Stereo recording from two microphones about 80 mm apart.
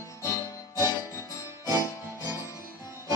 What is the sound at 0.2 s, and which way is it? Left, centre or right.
Music, left.